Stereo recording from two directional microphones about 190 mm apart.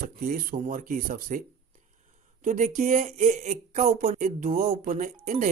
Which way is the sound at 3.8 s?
45° right (ahead or behind).